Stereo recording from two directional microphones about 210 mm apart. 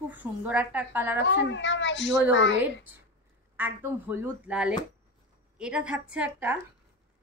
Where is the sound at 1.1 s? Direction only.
55° left (ahead or behind).